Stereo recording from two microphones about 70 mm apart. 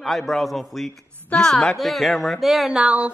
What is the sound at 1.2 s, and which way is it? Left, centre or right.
Speech, centre.